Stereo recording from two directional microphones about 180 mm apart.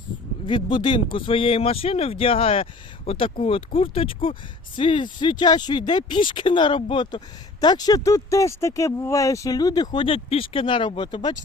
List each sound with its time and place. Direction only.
0.4 s speech: 25° left (ahead or behind)